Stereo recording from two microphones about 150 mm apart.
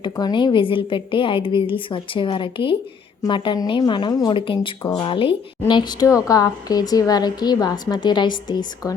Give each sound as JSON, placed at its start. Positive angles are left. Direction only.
{"t": 0.0, "sound": "a woman's voice", "side_deg": 30}